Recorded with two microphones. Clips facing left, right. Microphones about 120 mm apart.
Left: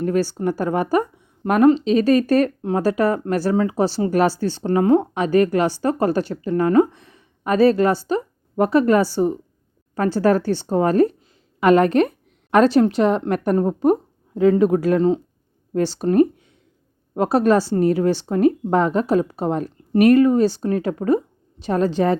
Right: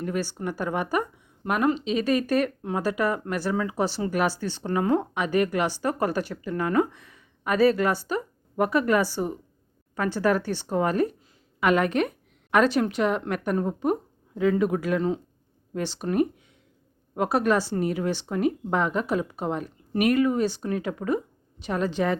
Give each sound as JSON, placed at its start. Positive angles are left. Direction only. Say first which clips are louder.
{"t": 0.0, "sound": "speech", "louder": "left 9 dB", "side_deg": 35}